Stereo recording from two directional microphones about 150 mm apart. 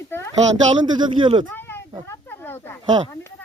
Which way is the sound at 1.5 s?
15° left (ahead or behind).